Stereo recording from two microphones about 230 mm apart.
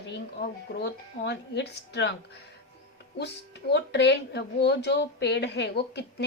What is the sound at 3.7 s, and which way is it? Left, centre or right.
A woman's voice, left.